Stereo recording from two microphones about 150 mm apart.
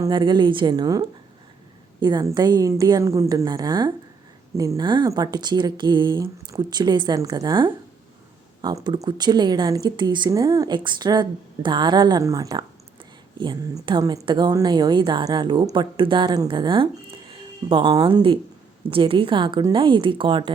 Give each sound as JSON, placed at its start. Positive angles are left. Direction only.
{"t": 0.0, "sound": "a woman's voice", "side_deg": -30}